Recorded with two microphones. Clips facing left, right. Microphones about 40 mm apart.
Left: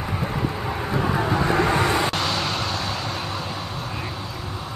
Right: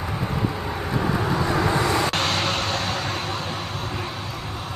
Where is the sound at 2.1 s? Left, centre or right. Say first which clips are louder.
Right 1 dB; right.